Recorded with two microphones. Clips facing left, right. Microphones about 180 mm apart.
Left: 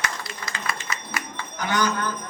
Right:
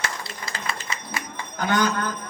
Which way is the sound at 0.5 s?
30° right (ahead or behind).